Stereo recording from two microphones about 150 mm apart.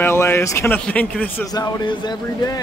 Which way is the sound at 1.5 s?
25° left (ahead or behind).